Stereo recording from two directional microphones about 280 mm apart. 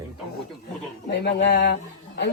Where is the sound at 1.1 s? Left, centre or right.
Left.